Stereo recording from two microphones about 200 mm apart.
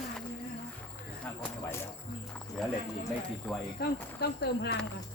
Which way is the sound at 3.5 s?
5° left (ahead or behind).